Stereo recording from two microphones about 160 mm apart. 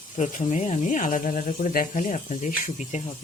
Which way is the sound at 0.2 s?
50° left (ahead or behind).